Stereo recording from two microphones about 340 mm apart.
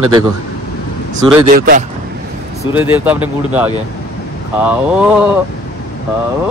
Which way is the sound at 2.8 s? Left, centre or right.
Centre.